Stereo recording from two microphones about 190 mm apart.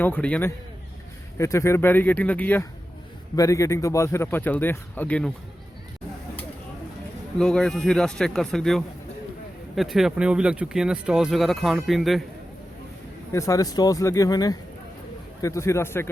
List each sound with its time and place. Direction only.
0.0 s speech: 5° left (ahead or behind)
7.3 s speech: 5° left (ahead or behind)
13.3 s speech: 15° left (ahead or behind)